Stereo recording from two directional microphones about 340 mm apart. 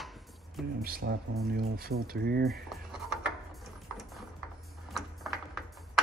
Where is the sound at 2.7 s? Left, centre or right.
Centre.